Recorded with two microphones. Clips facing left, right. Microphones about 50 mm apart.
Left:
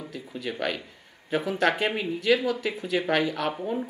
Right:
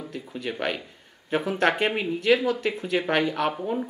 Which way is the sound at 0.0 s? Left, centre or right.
Centre.